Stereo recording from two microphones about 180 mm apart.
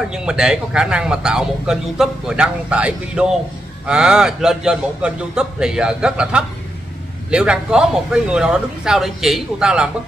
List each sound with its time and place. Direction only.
0.1 s speech: 5° right (ahead or behind)